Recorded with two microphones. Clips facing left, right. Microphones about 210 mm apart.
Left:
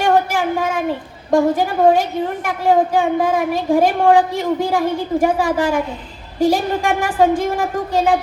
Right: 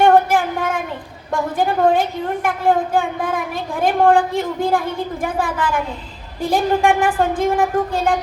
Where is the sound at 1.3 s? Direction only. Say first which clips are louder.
Left 5 dB; 55° right (ahead or behind).